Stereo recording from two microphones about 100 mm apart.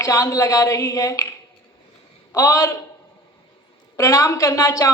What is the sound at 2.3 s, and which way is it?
Speech, 30° left (ahead or behind).